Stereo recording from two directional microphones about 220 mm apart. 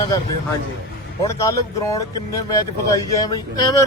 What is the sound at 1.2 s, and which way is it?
Speech, 15° left (ahead or behind).